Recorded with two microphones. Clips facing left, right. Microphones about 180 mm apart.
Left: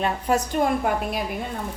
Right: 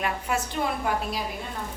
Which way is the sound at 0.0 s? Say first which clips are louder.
Left 5 dB; 40° left (ahead or behind).